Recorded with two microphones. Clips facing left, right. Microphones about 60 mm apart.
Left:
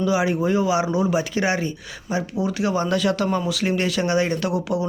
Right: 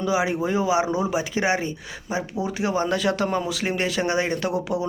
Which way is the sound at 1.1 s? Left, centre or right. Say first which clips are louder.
Left 1 dB; centre.